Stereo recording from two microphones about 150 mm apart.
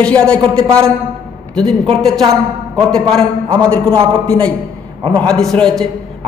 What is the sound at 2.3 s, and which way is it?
A man's voice, 5° left (ahead or behind).